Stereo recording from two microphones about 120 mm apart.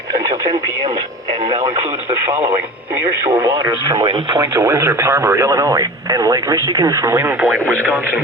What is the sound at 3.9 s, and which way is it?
Speech, 35° right (ahead or behind).